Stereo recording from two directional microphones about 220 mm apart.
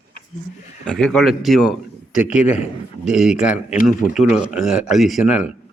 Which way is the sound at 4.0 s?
35° left (ahead or behind).